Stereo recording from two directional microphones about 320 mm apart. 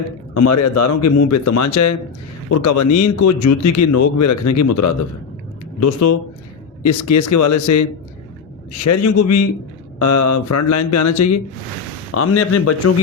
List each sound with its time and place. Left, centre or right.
0.3 s speech: left
8.8 s speech: left